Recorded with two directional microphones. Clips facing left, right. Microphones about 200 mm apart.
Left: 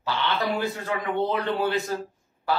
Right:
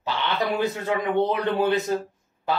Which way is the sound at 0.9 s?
20° right (ahead or behind).